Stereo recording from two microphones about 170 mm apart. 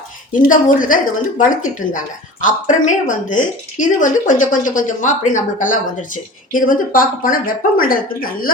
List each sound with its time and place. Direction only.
0.3 s a woman's voice: 50° left (ahead or behind)